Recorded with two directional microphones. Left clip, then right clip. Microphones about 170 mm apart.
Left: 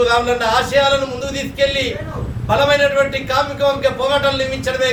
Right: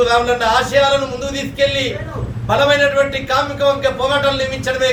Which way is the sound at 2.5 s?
5° left (ahead or behind).